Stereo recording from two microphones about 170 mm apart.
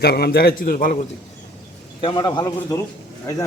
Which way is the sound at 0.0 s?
70° left (ahead or behind).